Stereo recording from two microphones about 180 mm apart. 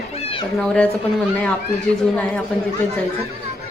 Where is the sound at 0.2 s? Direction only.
30° left (ahead or behind).